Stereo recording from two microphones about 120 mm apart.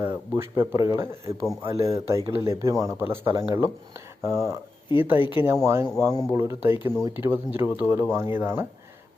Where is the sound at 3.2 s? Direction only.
45° right (ahead or behind).